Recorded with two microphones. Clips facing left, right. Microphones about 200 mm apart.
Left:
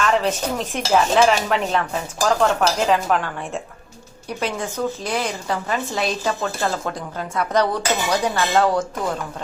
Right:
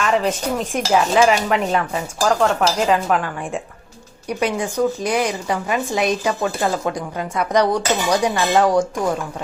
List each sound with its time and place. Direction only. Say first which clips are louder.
0.0 s dishes: right 1 dB; 5° right (ahead or behind)
4.4 s speech: right 5 dB; 15° right (ahead or behind)